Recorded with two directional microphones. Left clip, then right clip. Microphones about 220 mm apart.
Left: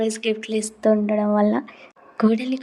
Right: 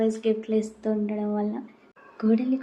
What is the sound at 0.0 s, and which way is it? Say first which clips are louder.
A woman's voice: left 2 dB; 50° left (ahead or behind).